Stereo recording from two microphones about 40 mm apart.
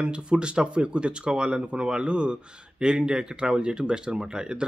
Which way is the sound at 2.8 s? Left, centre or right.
Centre.